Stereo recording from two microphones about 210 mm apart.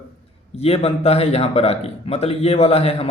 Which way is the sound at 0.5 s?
30° left (ahead or behind).